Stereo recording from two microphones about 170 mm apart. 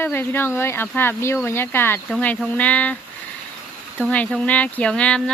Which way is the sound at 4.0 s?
5° left (ahead or behind).